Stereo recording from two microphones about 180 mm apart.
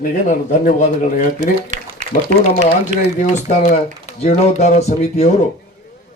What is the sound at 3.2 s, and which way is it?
A man's voice, 45° left (ahead or behind).